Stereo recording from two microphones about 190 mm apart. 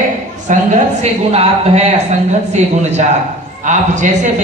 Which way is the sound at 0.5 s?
40° right (ahead or behind).